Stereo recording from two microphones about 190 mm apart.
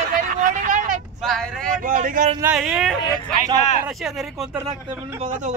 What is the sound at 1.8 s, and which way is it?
Speech, 45° right (ahead or behind).